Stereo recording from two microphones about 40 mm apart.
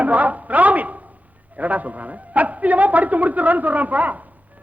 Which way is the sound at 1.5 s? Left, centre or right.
Right.